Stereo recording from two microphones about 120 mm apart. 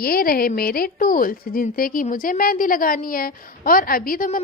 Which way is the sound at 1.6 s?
90° left.